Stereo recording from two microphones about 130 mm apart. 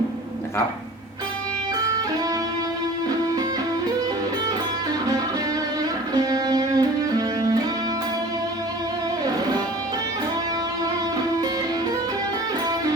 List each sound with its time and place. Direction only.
6.1 s music: 30° right (ahead or behind)